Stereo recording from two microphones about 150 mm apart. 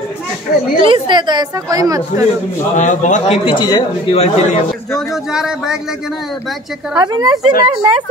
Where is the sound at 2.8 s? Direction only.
55° left (ahead or behind); by 4.2 s 30° left (ahead or behind).